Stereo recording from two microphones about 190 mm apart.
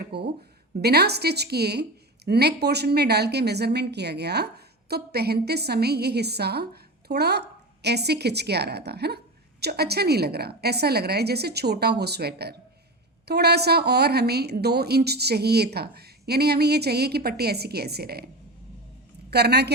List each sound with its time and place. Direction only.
0.0 s a woman's voice: 60° right (ahead or behind)
19.3 s a woman's voice: 60° right (ahead or behind)